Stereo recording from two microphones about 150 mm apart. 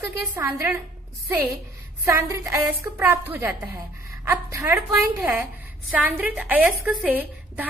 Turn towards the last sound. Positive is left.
turn(degrees=-10)  # may be behind; listen again after turning